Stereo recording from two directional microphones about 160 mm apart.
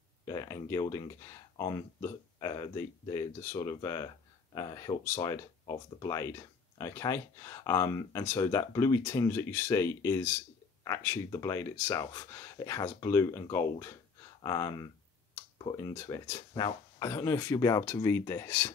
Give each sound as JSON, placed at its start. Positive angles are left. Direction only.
{"t": 0.2, "sound": "speech", "side_deg": 20}